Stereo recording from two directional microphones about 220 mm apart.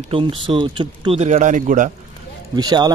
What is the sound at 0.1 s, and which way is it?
Speech, 25° right (ahead or behind).